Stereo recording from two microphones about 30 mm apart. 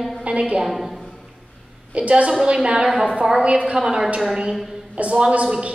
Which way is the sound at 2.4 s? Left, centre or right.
Right.